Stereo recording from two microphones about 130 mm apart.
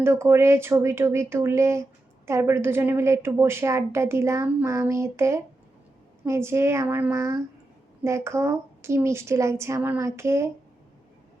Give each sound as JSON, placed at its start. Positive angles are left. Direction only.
{"t": 0.0, "sound": "speech", "side_deg": -20}